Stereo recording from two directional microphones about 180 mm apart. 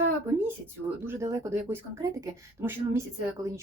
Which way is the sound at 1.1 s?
15° right (ahead or behind).